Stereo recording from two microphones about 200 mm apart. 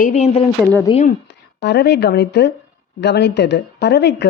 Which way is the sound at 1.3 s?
60° left (ahead or behind).